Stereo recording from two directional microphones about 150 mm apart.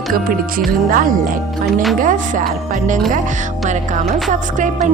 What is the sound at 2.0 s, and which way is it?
Speech, 60° right (ahead or behind).